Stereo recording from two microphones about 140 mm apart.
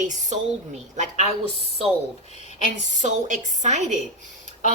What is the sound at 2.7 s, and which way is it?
A woman's voice, 60° right (ahead or behind).